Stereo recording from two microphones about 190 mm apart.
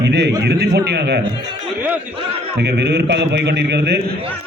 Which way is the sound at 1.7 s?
10° right (ahead or behind).